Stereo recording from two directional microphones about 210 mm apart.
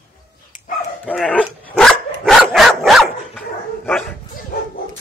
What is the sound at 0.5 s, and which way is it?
Dog, 40° left (ahead or behind).